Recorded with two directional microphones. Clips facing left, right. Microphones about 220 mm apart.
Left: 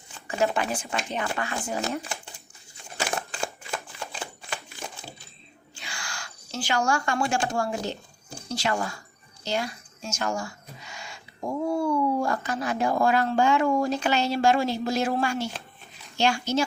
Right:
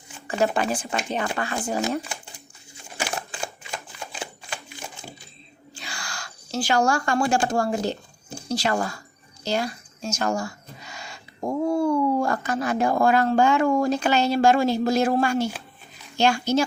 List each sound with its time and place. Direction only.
0.5 s speech: 35° right (ahead or behind)
2.9 s crumpling: centre (ahead or behind)
3.7 s shuffling cards: 15° right (ahead or behind)
5.7 s speech: 35° right (ahead or behind)